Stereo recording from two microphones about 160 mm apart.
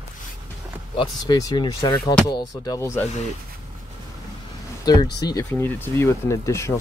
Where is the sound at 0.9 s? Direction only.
25° left (ahead or behind).